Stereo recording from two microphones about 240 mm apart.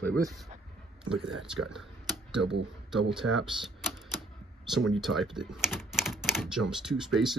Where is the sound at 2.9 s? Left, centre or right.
Centre.